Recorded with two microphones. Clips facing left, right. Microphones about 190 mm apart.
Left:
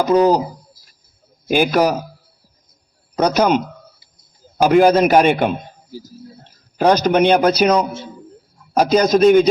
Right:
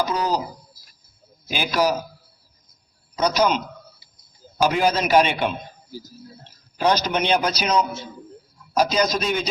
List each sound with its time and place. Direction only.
0.0 s speech: 55° left (ahead or behind)
1.5 s a man's voice: 50° left (ahead or behind)
3.2 s a man's voice: 55° left (ahead or behind)
4.6 s a man's voice: 50° left (ahead or behind)
6.7 s a man's voice: 50° left (ahead or behind)